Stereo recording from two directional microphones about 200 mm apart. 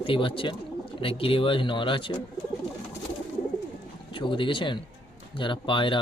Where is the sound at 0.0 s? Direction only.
25° left (ahead or behind).